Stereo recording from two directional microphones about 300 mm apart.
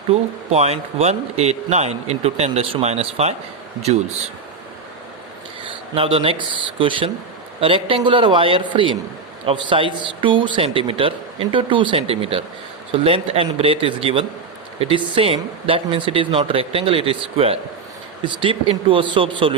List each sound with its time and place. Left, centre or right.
0.1 s a man's voice: right
5.9 s a man's voice: centre